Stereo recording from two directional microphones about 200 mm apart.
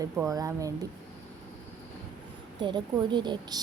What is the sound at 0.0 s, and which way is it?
Speech, 15° right (ahead or behind).